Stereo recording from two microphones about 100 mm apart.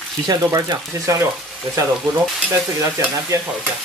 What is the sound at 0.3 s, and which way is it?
Speech, 35° right (ahead or behind).